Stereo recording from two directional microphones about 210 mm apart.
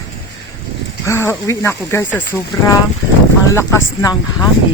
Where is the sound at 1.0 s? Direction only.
15° left (ahead or behind).